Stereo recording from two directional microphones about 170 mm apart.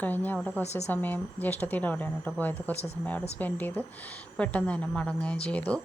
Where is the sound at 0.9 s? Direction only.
10° left (ahead or behind).